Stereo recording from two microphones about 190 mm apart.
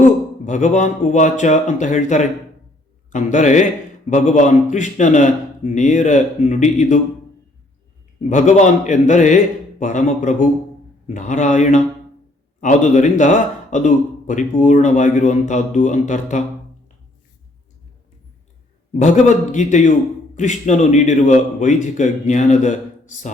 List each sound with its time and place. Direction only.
0.4 s a man's voice: 40° left (ahead or behind)
8.3 s a man's voice: 40° left (ahead or behind)
18.9 s a man's voice: 40° left (ahead or behind)